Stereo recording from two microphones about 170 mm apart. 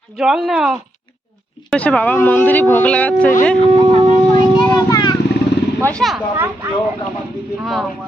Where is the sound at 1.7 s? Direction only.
10° left (ahead or behind).